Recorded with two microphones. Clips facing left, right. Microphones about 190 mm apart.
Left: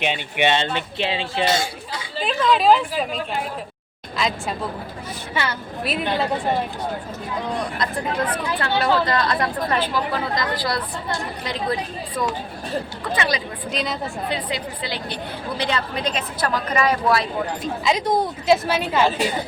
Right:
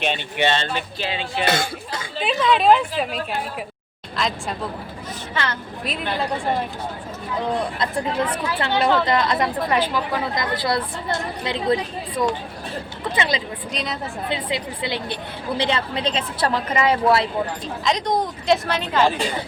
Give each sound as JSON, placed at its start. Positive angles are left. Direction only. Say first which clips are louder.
{"t": 0.0, "sound": "speech", "louder": "left 1 dB", "side_deg": 15}
{"t": 1.5, "sound": "speech", "louder": "even", "side_deg": -55}
{"t": 2.1, "sound": "a woman's voice", "louder": "even", "side_deg": 0}
{"t": 4.2, "sound": "a woman's voice", "louder": "left 1 dB", "side_deg": 0}
{"t": 8.5, "sound": "speech", "louder": "right 1 dB", "side_deg": -20}
{"t": 13.7, "sound": "a woman's voice", "louder": "left 3 dB", "side_deg": 0}
{"t": 14.3, "sound": "speech", "louder": "right 3 dB", "side_deg": -25}
{"t": 17.8, "sound": "a woman's voice", "louder": "left 1 dB", "side_deg": 5}